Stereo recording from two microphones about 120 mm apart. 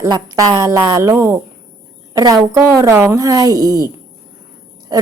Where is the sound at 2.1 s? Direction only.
30° right (ahead or behind).